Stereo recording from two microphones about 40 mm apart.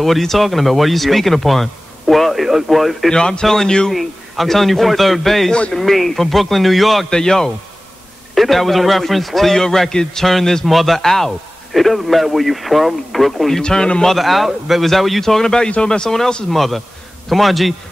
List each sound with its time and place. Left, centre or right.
0.0 s speech: centre
3.1 s a man's voice: centre
3.9 s speech: centre
7.1 s a man's voice: centre
8.4 s a man's voice: centre
13.6 s a man's voice: left
14.0 s speech: centre
16.4 s speech: centre